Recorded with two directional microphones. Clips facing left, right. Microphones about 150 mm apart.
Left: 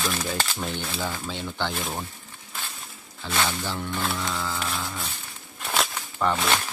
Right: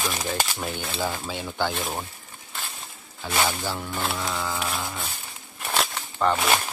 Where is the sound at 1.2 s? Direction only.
10° right (ahead or behind).